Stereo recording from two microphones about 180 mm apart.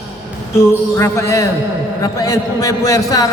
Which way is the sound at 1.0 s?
15° left (ahead or behind).